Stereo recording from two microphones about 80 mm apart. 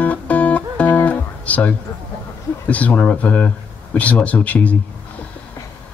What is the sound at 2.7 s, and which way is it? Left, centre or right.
Speech, centre.